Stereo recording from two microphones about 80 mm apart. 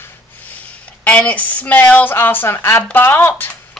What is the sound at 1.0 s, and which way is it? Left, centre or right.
A woman's voice, centre.